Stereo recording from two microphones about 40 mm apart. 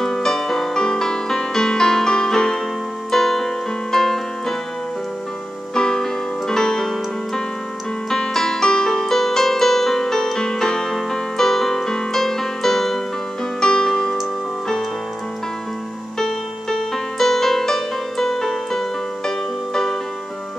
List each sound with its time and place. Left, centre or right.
0.0 s music: centre
5.8 s music: centre
13.6 s music: centre
16.2 s music: centre